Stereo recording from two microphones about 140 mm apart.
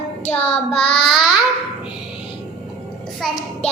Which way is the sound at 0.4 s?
45° left (ahead or behind).